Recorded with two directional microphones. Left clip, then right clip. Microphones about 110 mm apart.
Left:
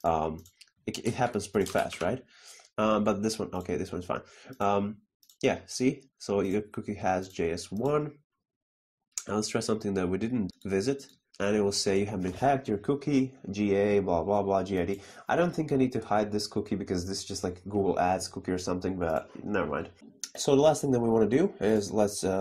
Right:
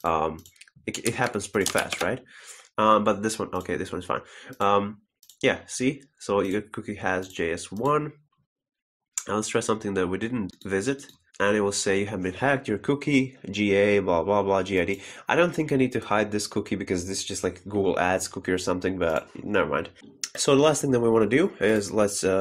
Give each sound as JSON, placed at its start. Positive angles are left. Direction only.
{"t": 0.0, "sound": "speech", "side_deg": 25}
{"t": 9.1, "sound": "speech", "side_deg": 25}
{"t": 12.7, "sound": "speech", "side_deg": 0}
{"t": 20.2, "sound": "speech", "side_deg": 10}